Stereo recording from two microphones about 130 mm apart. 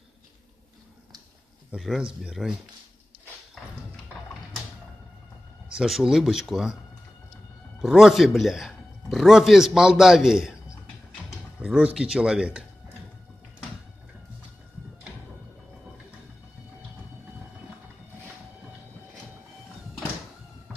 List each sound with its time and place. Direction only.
1.7 s speech: 5° right (ahead or behind)
5.7 s speech: 5° right (ahead or behind)
7.8 s speech: 5° right (ahead or behind)
11.6 s speech: 5° right (ahead or behind)